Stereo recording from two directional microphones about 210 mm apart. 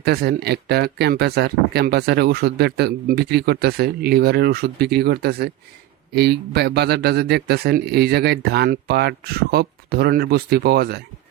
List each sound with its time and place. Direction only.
0.0 s speech: 50° right (ahead or behind)